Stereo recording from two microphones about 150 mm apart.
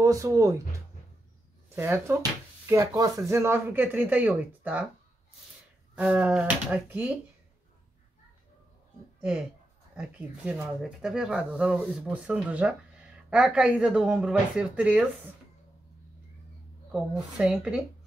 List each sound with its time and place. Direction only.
0.0 s speech: 20° right (ahead or behind)
1.8 s speech: 15° right (ahead or behind)
5.9 s speech: 10° right (ahead or behind)
9.9 s speech: 10° right (ahead or behind)
16.9 s speech: 5° right (ahead or behind)